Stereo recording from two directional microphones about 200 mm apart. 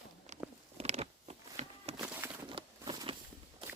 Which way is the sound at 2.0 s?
10° right (ahead or behind).